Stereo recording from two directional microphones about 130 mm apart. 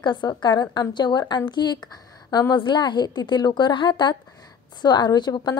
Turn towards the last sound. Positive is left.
turn(degrees=35)  # may be behind; listen again after turning